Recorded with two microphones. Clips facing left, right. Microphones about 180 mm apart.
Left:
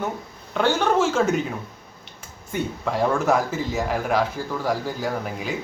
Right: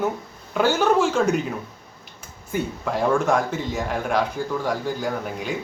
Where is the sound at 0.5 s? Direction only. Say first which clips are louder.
Right 1 dB; centre (ahead or behind).